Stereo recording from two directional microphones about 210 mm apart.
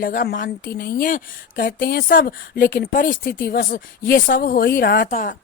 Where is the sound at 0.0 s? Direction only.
45° left (ahead or behind).